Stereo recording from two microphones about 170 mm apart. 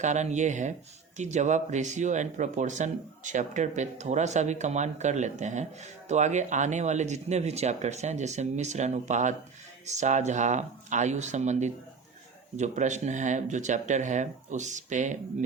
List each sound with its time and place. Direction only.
0.0 s speech: 45° right (ahead or behind)